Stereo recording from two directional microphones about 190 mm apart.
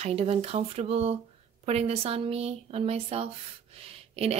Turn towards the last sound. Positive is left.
turn(degrees=-30)  # may be behind; listen again after turning